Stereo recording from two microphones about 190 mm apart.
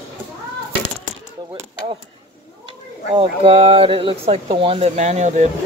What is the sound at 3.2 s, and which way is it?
Speech, 30° right (ahead or behind).